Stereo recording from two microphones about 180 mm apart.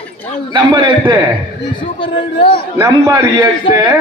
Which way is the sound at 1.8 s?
30° left (ahead or behind).